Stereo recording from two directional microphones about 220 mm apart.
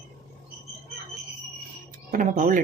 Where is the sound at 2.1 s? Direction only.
35° right (ahead or behind).